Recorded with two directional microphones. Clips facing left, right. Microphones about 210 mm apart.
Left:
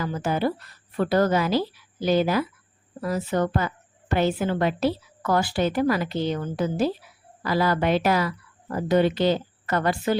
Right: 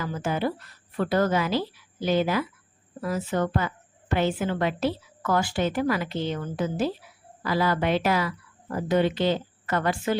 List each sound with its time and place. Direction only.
0.0 s a woman's voice: 35° left (ahead or behind)